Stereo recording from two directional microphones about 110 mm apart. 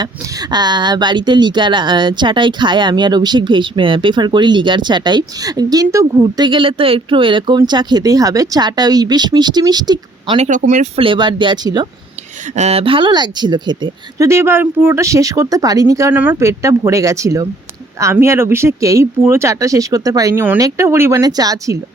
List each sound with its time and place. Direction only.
0.0 s speech: 40° right (ahead or behind)
6.4 s speech: 50° right (ahead or behind)
10.3 s speech: 80° right
11.0 s speech: 45° right (ahead or behind)
12.5 s speech: 85° right
12.8 s speech: 50° right (ahead or behind)
14.2 s speech: 25° right (ahead or behind)
20.3 s speech: 20° right (ahead or behind)
20.6 s speech: 30° right (ahead or behind)